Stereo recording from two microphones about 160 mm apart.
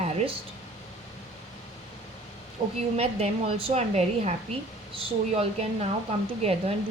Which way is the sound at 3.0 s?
40° right (ahead or behind).